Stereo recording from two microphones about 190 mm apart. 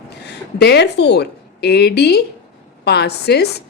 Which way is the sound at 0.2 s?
60° left (ahead or behind).